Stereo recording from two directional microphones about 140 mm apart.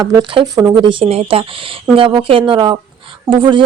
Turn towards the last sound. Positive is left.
turn(degrees=-35)  # may be behind; listen again after turning